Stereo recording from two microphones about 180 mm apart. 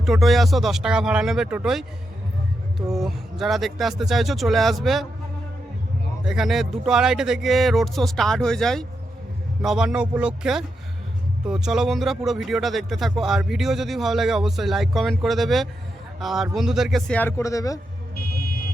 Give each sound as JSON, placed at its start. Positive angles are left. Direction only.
{"t": 0.0, "sound": "speech", "side_deg": 0}
{"t": 2.9, "sound": "speech", "side_deg": 0}
{"t": 6.2, "sound": "speech", "side_deg": 0}
{"t": 18.3, "sound": "vehicle", "side_deg": 55}